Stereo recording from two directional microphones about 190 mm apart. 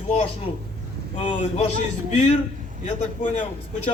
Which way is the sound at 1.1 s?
30° left (ahead or behind).